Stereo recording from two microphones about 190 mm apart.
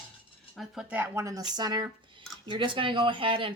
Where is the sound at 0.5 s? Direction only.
5° right (ahead or behind).